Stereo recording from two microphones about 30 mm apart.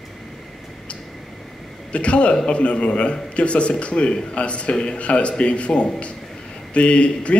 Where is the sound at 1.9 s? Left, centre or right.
Left.